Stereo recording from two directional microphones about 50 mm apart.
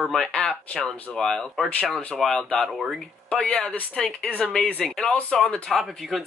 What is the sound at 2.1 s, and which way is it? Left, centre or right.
Speech, centre.